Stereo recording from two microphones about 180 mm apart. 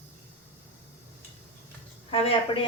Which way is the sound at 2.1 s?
30° left (ahead or behind).